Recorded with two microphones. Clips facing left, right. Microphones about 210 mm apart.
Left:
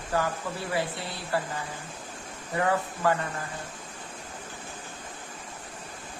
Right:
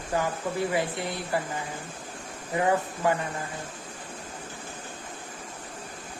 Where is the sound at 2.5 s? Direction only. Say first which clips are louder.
Right 2 dB; 20° right (ahead or behind).